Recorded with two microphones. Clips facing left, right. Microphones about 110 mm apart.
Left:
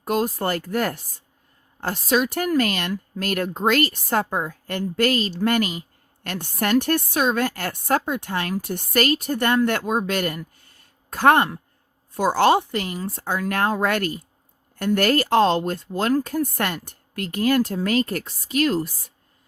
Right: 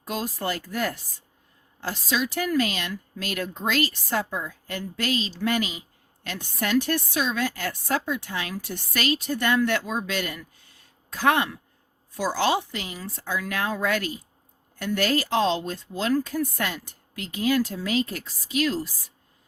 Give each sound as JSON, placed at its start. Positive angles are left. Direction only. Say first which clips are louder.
{"t": 0.0, "sound": "a woman's voice", "louder": "left 7 dB", "side_deg": 50}